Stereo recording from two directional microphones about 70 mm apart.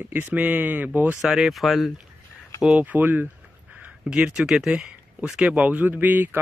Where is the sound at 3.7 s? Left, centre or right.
Right.